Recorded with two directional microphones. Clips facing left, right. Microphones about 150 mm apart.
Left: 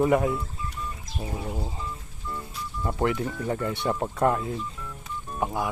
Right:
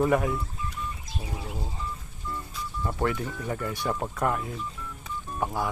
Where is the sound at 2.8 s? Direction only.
20° left (ahead or behind).